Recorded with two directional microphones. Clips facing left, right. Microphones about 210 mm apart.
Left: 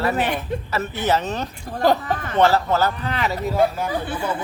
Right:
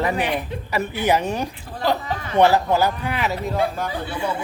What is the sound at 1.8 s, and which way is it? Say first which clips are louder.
Speech: left 4 dB; 50° left (ahead or behind).